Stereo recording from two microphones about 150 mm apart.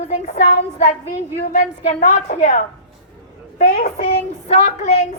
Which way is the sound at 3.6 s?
75° left (ahead or behind).